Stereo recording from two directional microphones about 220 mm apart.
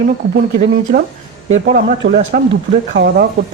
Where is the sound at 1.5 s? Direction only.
55° right (ahead or behind).